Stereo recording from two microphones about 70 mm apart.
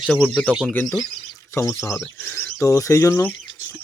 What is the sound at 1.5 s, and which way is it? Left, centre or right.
Speech, left.